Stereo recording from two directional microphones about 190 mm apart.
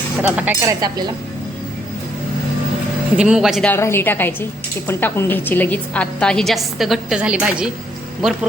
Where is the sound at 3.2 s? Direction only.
5° right (ahead or behind).